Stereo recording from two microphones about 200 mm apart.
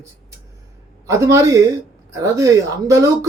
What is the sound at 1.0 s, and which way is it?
Speech, 15° right (ahead or behind).